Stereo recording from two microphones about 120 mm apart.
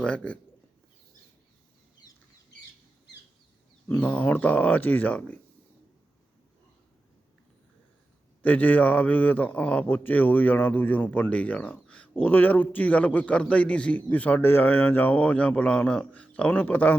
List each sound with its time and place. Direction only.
0.0 s a man's voice: 10° left (ahead or behind)
2.0 s chicken: 35° left (ahead or behind)
3.8 s a man's voice: 15° left (ahead or behind)
8.4 s a man's voice: 15° left (ahead or behind)